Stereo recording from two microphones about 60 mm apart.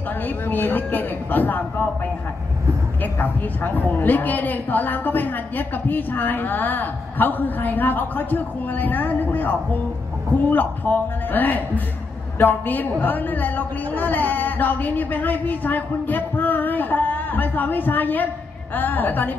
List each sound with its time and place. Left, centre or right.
0.5 s a woman's voice: left
3.0 s a woman's voice: left